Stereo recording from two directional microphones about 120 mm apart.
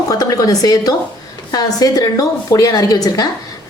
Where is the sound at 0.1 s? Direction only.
30° left (ahead or behind).